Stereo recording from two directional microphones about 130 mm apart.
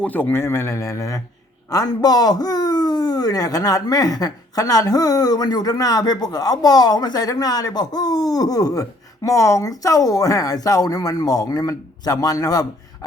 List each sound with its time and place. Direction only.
0.0 s speech: 15° left (ahead or behind)